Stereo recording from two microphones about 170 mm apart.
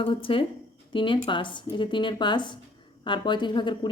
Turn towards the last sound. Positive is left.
turn(degrees=25)  # may be behind; listen again after turning